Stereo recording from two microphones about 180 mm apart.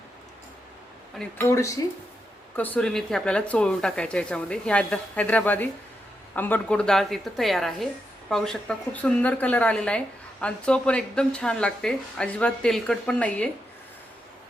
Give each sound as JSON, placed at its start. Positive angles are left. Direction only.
{"t": 1.2, "sound": "a woman's voice", "side_deg": 15}